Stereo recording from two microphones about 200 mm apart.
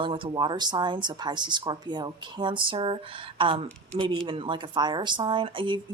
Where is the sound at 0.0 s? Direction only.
25° right (ahead or behind).